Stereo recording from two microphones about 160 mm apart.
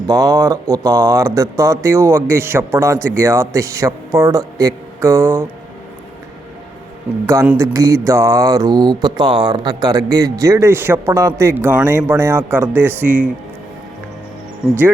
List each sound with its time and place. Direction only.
0.1 s mantra: 20° right (ahead or behind)
1.4 s a man's voice: 20° right (ahead or behind)
7.3 s mantra: 20° right (ahead or behind)